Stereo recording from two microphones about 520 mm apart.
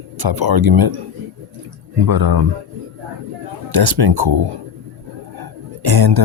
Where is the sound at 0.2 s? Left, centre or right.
Right.